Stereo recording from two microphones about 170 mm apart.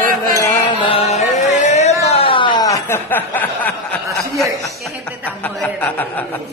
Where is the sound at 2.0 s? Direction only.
35° left (ahead or behind); by 3.7 s 10° left (ahead or behind).